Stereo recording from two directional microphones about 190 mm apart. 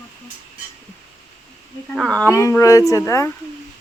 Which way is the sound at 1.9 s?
5° left (ahead or behind).